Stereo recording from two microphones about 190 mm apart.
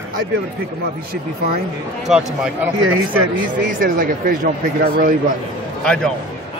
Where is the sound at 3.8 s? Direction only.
45° right (ahead or behind).